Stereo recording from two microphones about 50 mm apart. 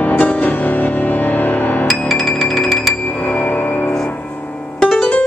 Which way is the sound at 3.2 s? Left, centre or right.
Left.